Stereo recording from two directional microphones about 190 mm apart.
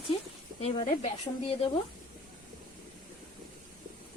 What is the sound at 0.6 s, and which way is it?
Speech, 35° left (ahead or behind).